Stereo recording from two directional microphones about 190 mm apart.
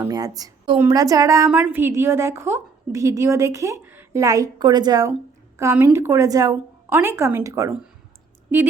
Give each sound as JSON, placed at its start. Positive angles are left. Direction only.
{"t": 0.0, "sound": "a woman's voice", "side_deg": -20}